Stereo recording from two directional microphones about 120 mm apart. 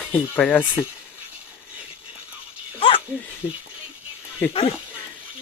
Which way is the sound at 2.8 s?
45° left (ahead or behind).